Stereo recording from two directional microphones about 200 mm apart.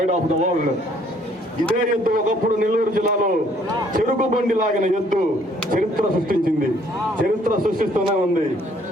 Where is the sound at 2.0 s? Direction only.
45° right (ahead or behind).